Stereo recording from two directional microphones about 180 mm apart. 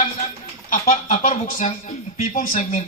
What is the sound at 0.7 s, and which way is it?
Speech, 45° left (ahead or behind).